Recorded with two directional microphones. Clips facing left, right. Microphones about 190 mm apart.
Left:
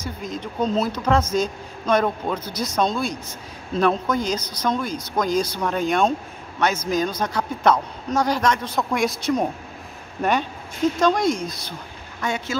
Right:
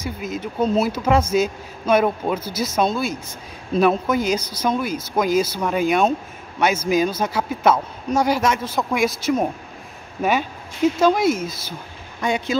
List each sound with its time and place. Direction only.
0.0 s speech: 5° right (ahead or behind)
11.0 s speech: 5° right (ahead or behind)
12.2 s speech: 15° right (ahead or behind)